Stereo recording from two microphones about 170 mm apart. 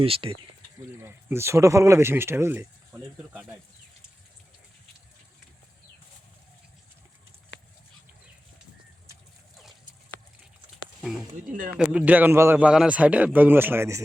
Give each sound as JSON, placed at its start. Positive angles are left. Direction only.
{"t": 0.0, "sound": "speech", "side_deg": -35}
{"t": 1.0, "sound": "a man's voice", "side_deg": -15}
{"t": 11.3, "sound": "speech", "side_deg": -50}
{"t": 11.8, "sound": "a man's voice", "side_deg": -5}